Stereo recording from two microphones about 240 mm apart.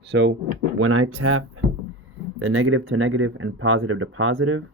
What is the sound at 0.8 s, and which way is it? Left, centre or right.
Speech, right.